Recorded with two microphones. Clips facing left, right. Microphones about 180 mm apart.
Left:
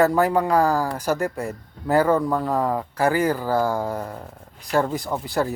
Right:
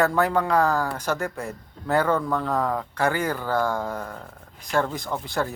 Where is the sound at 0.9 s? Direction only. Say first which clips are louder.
Left 3 dB; 35° left (ahead or behind).